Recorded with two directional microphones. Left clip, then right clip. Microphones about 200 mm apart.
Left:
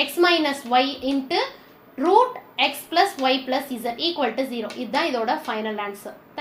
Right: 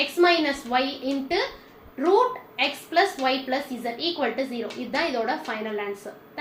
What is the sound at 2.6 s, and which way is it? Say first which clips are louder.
A woman's voice: left 2 dB; 45° left (ahead or behind).